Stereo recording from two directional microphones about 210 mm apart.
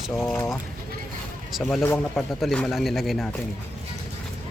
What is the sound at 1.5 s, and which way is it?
Speech, centre (ahead or behind).